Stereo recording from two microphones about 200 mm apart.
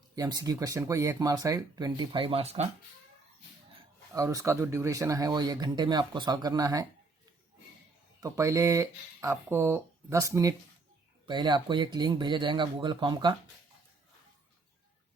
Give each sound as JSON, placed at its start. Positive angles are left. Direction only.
{"t": 0.2, "sound": "speech", "side_deg": -20}
{"t": 4.1, "sound": "speech", "side_deg": -15}
{"t": 8.2, "sound": "speech", "side_deg": -15}